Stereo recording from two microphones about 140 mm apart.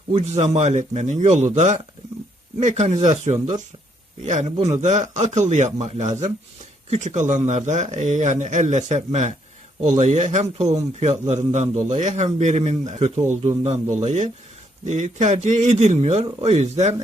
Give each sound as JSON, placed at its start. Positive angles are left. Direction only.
{"t": 0.1, "sound": "a man's voice", "side_deg": -50}